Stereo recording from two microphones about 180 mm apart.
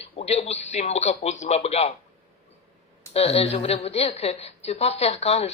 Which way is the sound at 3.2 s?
35° left (ahead or behind).